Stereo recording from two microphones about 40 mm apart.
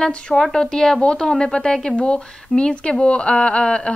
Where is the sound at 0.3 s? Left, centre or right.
Centre.